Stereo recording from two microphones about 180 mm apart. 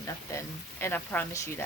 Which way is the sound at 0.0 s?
15° left (ahead or behind).